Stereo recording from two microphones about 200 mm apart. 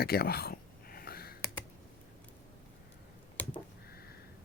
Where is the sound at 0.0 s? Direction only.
50° left (ahead or behind).